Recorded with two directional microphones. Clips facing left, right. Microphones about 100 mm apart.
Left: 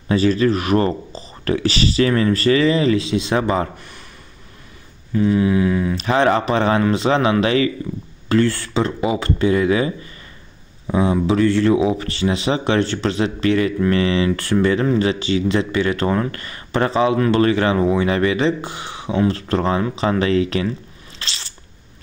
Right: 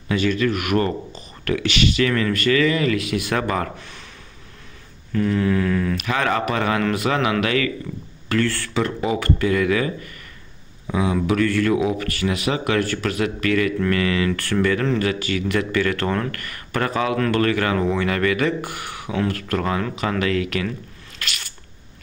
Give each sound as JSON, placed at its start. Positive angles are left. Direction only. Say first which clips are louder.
{"t": 0.1, "sound": "a man's voice", "louder": "left 4 dB", "side_deg": 35}
{"t": 5.1, "sound": "mantra", "louder": "left 4 dB", "side_deg": 15}
{"t": 5.9, "sound": "a man's voice", "louder": "left 5 dB", "side_deg": 30}
{"t": 21.2, "sound": "sneeze", "louder": "right 1 dB", "side_deg": 25}